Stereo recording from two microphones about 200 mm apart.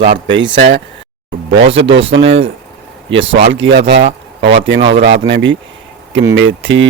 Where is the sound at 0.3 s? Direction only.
65° right (ahead or behind).